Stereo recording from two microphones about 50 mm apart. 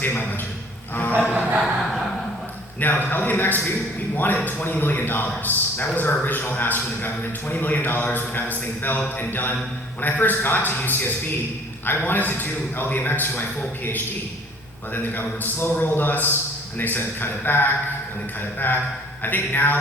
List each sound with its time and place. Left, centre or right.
0.0 s a man's voice: left
1.3 s a sound: right
2.8 s a man's voice: left
14.9 s a man's voice: left